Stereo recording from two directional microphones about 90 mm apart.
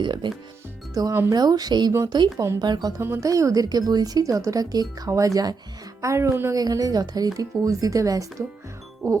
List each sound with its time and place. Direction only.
0.0 s speech: 55° right (ahead or behind)
1.0 s speech: 45° right (ahead or behind)
3.0 s a woman's voice: 25° right (ahead or behind)
3.2 s speech: 40° right (ahead or behind)
6.5 s speech: 40° right (ahead or behind)